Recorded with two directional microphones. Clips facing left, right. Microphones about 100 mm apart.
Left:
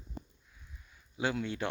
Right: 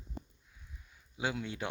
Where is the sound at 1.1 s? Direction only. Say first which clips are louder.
Left 3 dB; 10° right (ahead or behind).